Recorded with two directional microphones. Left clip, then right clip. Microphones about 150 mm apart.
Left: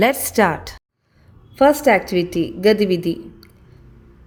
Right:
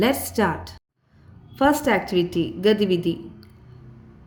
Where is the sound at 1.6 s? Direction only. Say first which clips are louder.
Left 6 dB; 40° left (ahead or behind).